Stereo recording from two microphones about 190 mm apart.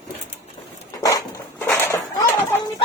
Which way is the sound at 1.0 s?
20° left (ahead or behind).